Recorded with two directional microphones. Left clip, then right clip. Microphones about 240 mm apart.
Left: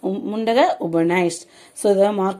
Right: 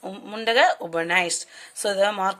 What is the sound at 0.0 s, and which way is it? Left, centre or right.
Speech, centre.